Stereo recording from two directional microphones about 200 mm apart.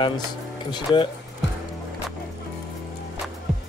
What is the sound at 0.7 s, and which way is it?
Music, 20° left (ahead or behind).